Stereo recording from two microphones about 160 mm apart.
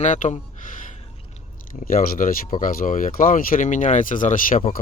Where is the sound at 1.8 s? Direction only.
65° left (ahead or behind).